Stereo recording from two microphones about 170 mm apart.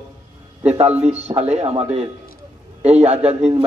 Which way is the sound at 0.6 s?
35° right (ahead or behind).